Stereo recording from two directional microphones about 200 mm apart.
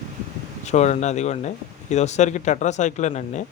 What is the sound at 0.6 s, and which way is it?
A man's voice, 35° left (ahead or behind).